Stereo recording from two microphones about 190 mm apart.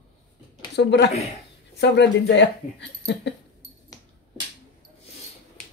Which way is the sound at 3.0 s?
65° left (ahead or behind).